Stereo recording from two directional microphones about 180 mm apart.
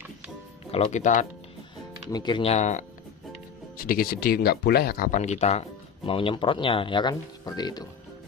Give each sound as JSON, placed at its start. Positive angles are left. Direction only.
{"t": 0.8, "sound": "speech", "side_deg": 45}
{"t": 2.0, "sound": "speech", "side_deg": 25}
{"t": 3.7, "sound": "speech", "side_deg": 55}